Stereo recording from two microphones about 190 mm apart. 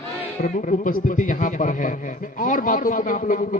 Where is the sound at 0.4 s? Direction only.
45° left (ahead or behind).